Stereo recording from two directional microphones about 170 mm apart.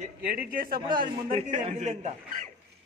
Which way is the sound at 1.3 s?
35° right (ahead or behind).